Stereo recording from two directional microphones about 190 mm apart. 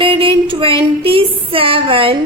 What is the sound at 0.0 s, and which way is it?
Female singing, 25° right (ahead or behind).